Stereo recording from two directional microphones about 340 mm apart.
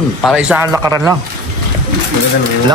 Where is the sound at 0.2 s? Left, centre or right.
Centre.